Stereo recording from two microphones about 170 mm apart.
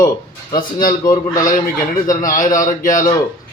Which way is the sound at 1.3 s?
20° left (ahead or behind).